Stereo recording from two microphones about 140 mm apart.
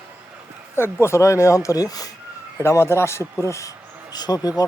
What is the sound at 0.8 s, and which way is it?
A man's voice, 20° left (ahead or behind).